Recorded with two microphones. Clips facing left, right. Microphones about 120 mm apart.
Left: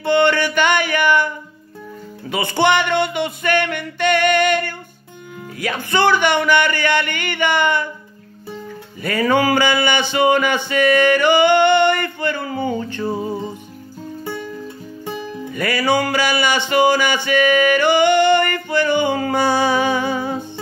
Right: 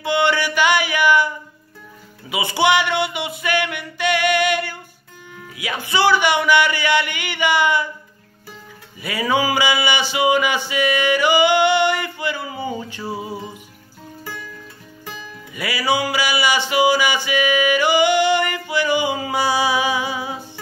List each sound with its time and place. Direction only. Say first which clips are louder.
0.0 s music: left 3 dB; 10° right (ahead or behind)
1.0 s a sound: right 1 dB; 10° right (ahead or behind)
2.6 s music: left 1 dB; 10° right (ahead or behind)
9.2 s music: left 3 dB; 10° right (ahead or behind)
12.4 s a sound: left 5 dB; 55° left (ahead or behind)
12.6 s music: left 6 dB; 10° right (ahead or behind)
15.5 s music: left 3 dB; 10° right (ahead or behind)